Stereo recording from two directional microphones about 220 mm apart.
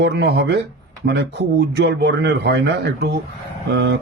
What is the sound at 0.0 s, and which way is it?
Speech, 50° right (ahead or behind).